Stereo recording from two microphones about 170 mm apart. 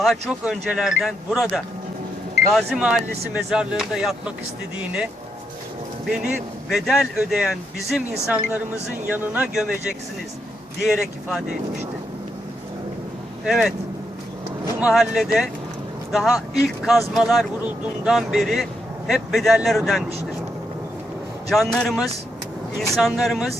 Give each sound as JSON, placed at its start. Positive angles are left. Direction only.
{"t": 0.0, "sound": "speech", "side_deg": 0}
{"t": 6.1, "sound": "speech", "side_deg": -5}
{"t": 10.8, "sound": "speech", "side_deg": 0}
{"t": 13.4, "sound": "speech", "side_deg": -5}
{"t": 14.8, "sound": "speech", "side_deg": 0}
{"t": 21.5, "sound": "speech", "side_deg": 0}